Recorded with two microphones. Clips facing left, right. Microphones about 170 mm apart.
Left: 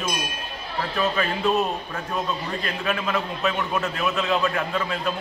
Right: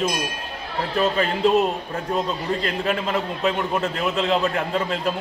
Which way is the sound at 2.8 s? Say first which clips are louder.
Right 2 dB; 25° right (ahead or behind).